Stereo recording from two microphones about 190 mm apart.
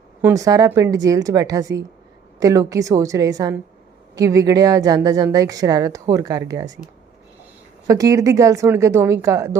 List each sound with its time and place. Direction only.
0.2 s a woman's voice: 15° right (ahead or behind)
7.9 s a woman's voice: 15° right (ahead or behind)